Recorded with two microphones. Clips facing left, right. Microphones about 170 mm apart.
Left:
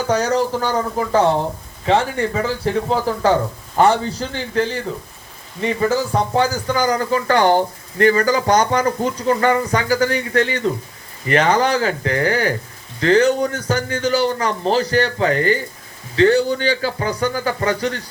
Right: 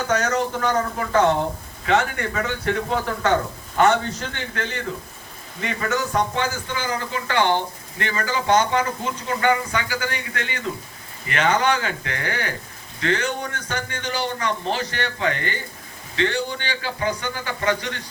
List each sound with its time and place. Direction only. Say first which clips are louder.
0.1 s speech: left 5 dB; 35° left (ahead or behind)